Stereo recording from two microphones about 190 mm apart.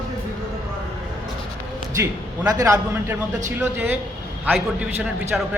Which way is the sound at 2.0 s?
15° right (ahead or behind).